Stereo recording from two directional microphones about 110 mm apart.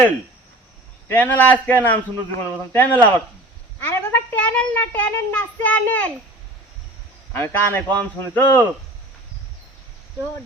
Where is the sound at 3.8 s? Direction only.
20° left (ahead or behind).